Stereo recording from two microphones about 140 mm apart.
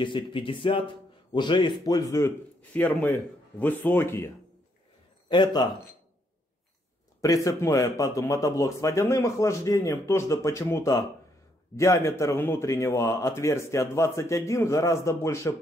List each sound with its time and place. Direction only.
0.0 s speech: 35° left (ahead or behind); by 4.3 s 20° left (ahead or behind)
5.3 s speech: 30° left (ahead or behind)
7.2 s speech: 25° left (ahead or behind)